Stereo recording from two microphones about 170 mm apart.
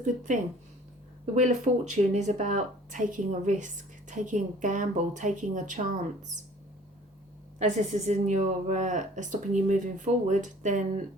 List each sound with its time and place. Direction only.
0.0 s speech: 50° right (ahead or behind)
7.6 s speech: 40° right (ahead or behind)